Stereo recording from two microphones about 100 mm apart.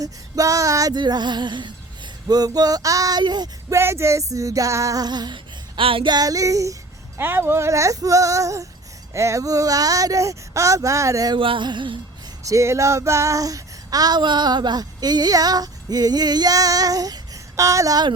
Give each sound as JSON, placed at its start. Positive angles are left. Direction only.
{"t": 0.0, "sound": "female singing", "side_deg": -35}
{"t": 3.7, "sound": "female singing", "side_deg": -25}
{"t": 6.1, "sound": "female singing", "side_deg": -40}
{"t": 7.2, "sound": "female singing", "side_deg": -20}
{"t": 11.3, "sound": "music", "side_deg": -60}
{"t": 12.5, "sound": "female singing", "side_deg": -30}